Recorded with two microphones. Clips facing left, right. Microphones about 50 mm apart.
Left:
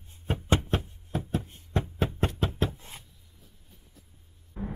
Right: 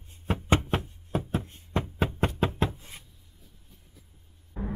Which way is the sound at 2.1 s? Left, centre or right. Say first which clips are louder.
Right 2 dB; right.